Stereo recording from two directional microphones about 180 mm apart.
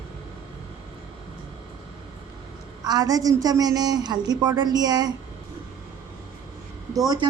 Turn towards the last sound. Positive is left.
turn(degrees=-25)  # may be behind; listen again after turning